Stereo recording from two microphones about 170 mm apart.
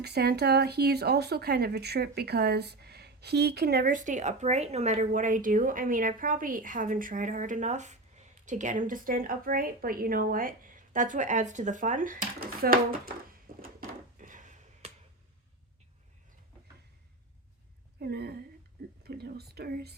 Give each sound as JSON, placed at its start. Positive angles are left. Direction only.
{"t": 0.0, "sound": "speech", "side_deg": -70}
{"t": 13.5, "sound": "a sound", "side_deg": -60}
{"t": 14.2, "sound": "finger snapping", "side_deg": -50}
{"t": 18.0, "sound": "a woman's voice", "side_deg": -70}